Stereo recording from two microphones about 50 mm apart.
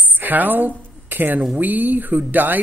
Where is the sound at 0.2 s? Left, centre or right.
Right.